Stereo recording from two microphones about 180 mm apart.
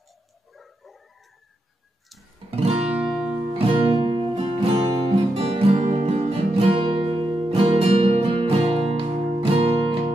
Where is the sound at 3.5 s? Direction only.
30° right (ahead or behind).